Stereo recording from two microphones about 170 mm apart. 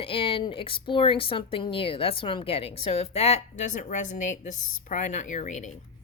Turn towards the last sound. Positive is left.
turn(degrees=45)  # may be behind; listen again after turning